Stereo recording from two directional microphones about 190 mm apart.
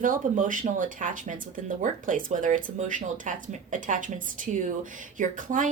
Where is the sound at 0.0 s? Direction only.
45° right (ahead or behind).